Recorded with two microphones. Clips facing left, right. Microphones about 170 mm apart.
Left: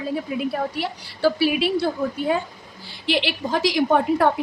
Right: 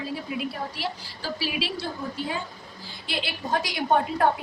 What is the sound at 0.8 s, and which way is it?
A woman's voice, 60° left (ahead or behind).